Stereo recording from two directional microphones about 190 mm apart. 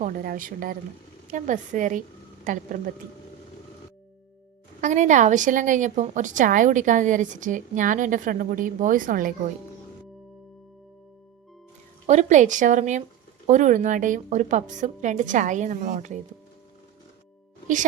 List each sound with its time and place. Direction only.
0.0 s a woman's voice: 50° right (ahead or behind)
4.8 s a woman's voice: 40° right (ahead or behind)
12.0 s a woman's voice: 40° right (ahead or behind)